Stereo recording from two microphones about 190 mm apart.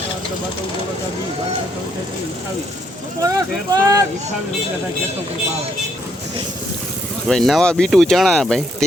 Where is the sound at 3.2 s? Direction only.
20° right (ahead or behind).